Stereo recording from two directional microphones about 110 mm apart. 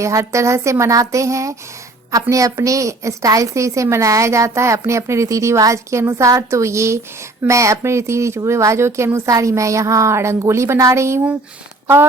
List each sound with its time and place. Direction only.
0.0 s a woman's voice: 30° right (ahead or behind)